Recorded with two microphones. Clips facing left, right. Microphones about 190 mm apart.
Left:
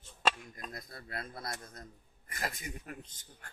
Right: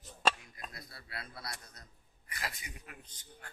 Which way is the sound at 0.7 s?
45° left (ahead or behind).